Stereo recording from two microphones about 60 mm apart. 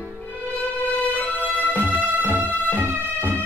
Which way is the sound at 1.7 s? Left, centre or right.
Right.